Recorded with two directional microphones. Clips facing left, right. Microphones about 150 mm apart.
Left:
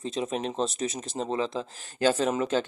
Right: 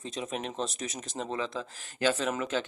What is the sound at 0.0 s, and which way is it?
Speech, 30° left (ahead or behind).